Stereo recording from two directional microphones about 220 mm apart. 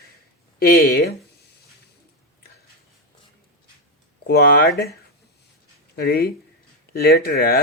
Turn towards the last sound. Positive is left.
turn(degrees=45)  # may be behind; listen again after turning